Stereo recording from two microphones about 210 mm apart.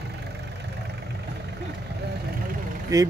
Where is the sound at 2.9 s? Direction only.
15° right (ahead or behind).